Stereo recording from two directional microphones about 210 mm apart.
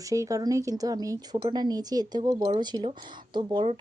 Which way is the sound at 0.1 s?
15° right (ahead or behind).